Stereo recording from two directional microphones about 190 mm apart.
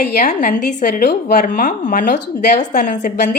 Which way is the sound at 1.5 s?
40° left (ahead or behind).